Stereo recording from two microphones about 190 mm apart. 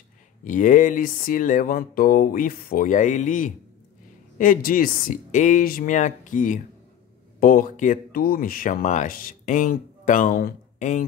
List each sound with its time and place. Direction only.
0.4 s speech: 45° left (ahead or behind)